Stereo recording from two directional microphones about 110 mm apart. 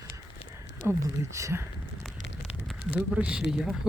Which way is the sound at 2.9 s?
10° right (ahead or behind).